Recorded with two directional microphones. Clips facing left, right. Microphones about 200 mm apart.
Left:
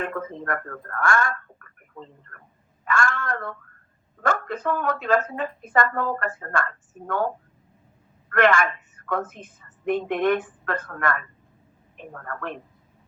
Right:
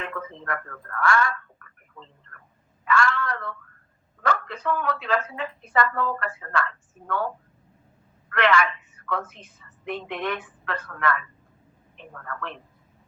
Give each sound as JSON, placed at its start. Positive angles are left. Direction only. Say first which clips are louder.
{"t": 0.0, "sound": "a woman's voice", "louder": "left 5 dB", "side_deg": 50}